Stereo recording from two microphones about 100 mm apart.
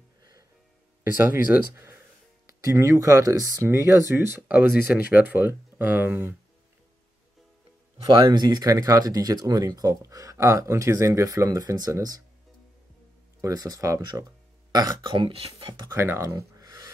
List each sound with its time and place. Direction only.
0.2 s music: 40° right (ahead or behind)
1.3 s speech: 20° right (ahead or behind)
8.0 s speech: 40° right (ahead or behind)
13.4 s speech: 35° right (ahead or behind); by 15.9 s 50° right (ahead or behind)
15.9 s speech: 30° right (ahead or behind)